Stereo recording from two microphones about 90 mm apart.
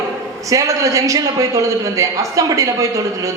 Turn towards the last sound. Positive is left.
turn(degrees=-35)  # may be behind; listen again after turning